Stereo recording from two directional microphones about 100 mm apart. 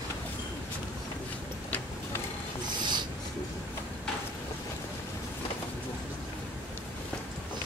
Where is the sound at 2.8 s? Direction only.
50° right (ahead or behind).